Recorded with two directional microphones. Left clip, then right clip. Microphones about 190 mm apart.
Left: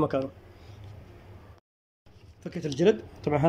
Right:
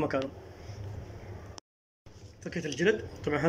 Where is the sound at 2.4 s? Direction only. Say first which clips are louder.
Left 4 dB; 15° left (ahead or behind).